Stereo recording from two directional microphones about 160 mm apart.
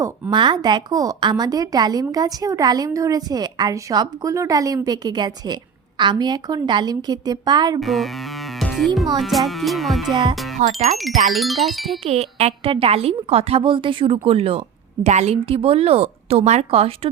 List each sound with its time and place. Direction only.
0.0 s a woman's voice: 30° right (ahead or behind)
7.8 s music: centre (ahead or behind)
9.1 s speech: centre (ahead or behind)
10.3 s music: centre (ahead or behind)
10.6 s speech: 45° right (ahead or behind)
10.9 s speech: centre (ahead or behind)
12.0 s a woman's voice: 40° right (ahead or behind)